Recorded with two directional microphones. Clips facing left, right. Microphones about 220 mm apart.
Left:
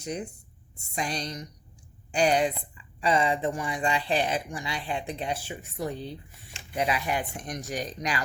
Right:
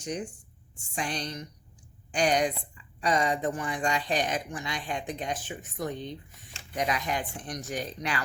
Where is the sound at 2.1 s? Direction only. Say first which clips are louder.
Left 2 dB; 35° left (ahead or behind).